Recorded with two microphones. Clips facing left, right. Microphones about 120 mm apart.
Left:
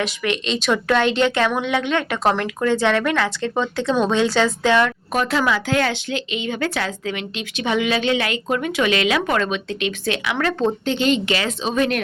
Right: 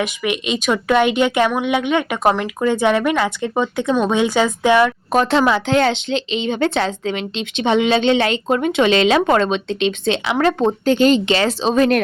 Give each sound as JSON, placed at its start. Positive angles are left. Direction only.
{"t": 0.0, "sound": "speech", "side_deg": -10}
{"t": 5.1, "sound": "a woman's voice", "side_deg": -30}
{"t": 10.8, "sound": "speech", "side_deg": -45}
{"t": 11.3, "sound": "speech", "side_deg": -30}